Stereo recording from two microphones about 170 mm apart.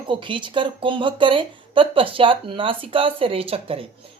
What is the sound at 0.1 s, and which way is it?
Speech, 30° right (ahead or behind).